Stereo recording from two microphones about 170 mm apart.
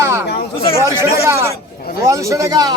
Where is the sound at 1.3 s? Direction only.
15° right (ahead or behind).